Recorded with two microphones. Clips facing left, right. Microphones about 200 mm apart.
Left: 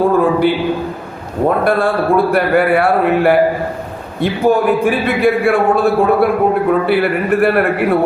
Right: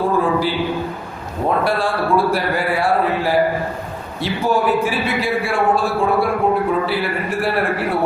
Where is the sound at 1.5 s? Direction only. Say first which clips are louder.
Left 5 dB; 55° left (ahead or behind).